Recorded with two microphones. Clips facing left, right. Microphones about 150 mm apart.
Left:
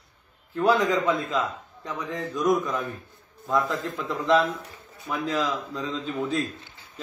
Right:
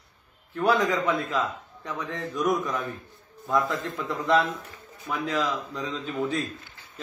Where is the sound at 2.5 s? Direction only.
15° left (ahead or behind).